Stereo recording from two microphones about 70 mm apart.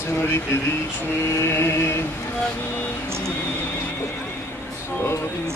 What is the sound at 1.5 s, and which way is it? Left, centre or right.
Speech, left.